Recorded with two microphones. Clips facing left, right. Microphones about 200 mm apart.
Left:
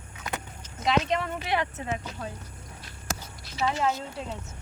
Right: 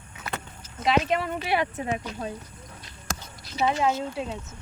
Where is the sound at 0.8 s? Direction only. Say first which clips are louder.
Right 2 dB; 5° right (ahead or behind).